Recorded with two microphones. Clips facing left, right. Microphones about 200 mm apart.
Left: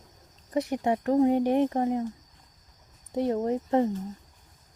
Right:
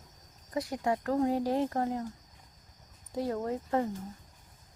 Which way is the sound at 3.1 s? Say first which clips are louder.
Left 6 dB; 20° left (ahead or behind).